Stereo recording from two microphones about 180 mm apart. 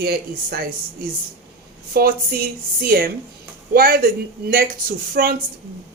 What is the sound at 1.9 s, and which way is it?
Speech, 55° right (ahead or behind).